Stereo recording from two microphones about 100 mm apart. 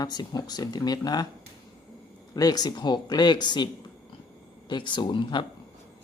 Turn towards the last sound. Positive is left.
turn(degrees=50)  # may be behind; listen again after turning